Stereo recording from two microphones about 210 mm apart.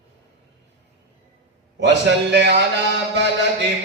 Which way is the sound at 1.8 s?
55° right (ahead or behind).